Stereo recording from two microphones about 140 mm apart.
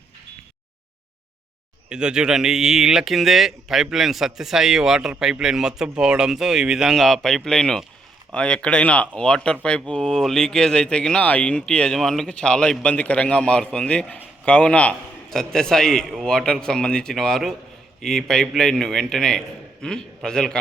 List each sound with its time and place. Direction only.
1.9 s speech: 5° right (ahead or behind)